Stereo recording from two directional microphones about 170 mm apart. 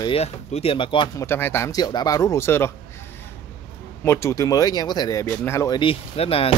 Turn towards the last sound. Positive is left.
turn(degrees=35)  # may be behind; listen again after turning